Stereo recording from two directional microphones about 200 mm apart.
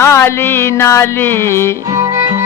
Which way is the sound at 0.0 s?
15° left (ahead or behind).